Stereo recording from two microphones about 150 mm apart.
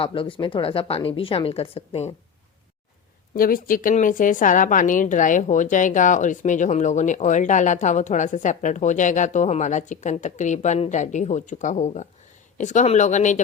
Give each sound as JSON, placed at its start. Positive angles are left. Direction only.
{"t": 0.0, "sound": "speech", "side_deg": 35}
{"t": 3.3, "sound": "speech", "side_deg": 75}